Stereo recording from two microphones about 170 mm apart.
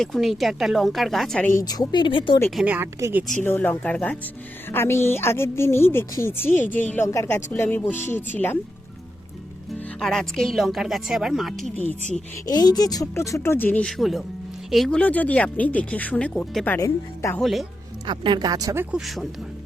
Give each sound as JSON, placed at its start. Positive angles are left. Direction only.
{"t": 0.0, "sound": "speech", "side_deg": 0}
{"t": 1.5, "sound": "a woman's voice", "side_deg": 20}
{"t": 2.6, "sound": "a woman's voice", "side_deg": -10}
{"t": 3.4, "sound": "speech", "side_deg": 10}
{"t": 9.7, "sound": "speech", "side_deg": 5}
{"t": 12.5, "sound": "speech", "side_deg": 25}
{"t": 17.4, "sound": "speech", "side_deg": 0}
{"t": 18.0, "sound": "speech", "side_deg": -25}
{"t": 18.9, "sound": "speech", "side_deg": 0}